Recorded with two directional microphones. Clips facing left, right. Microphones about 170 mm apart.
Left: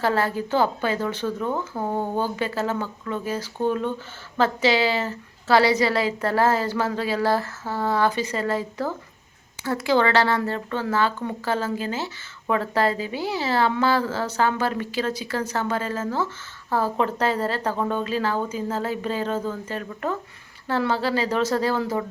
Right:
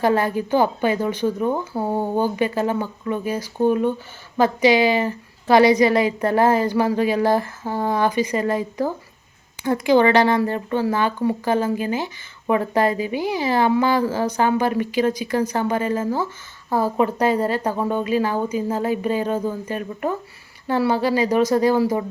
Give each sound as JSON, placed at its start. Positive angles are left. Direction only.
{"t": 0.0, "sound": "speech", "side_deg": -15}